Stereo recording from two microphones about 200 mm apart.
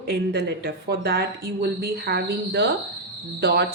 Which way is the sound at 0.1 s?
50° right (ahead or behind).